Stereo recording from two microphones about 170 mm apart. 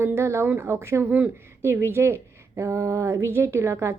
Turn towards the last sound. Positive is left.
turn(degrees=-15)  # may be behind; listen again after turning